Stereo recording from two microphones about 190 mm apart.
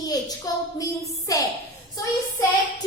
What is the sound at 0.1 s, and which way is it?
A woman's voice, 20° left (ahead or behind).